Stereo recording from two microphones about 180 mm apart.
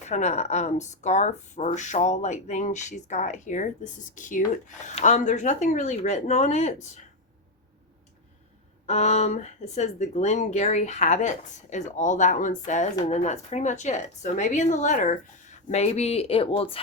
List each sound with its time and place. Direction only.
0.0 s speech: 40° left (ahead or behind)
8.9 s speech: 40° left (ahead or behind)